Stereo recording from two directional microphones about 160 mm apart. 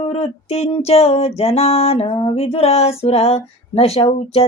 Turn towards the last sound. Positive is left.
turn(degrees=40)  # may be behind; listen again after turning